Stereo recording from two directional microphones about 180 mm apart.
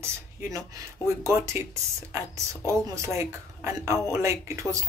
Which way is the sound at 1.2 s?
15° right (ahead or behind).